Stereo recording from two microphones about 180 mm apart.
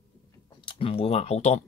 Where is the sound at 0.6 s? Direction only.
30° left (ahead or behind).